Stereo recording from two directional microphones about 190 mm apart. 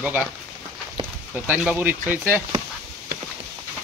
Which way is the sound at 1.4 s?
5° right (ahead or behind).